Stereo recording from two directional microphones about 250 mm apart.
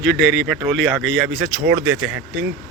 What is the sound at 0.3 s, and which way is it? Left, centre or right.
Speech, centre.